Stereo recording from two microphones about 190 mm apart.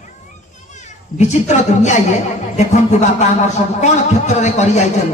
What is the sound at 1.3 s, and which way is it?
A man's voice, 40° left (ahead or behind).